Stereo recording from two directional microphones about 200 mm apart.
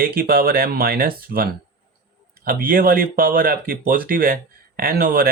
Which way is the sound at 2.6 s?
45° right (ahead or behind).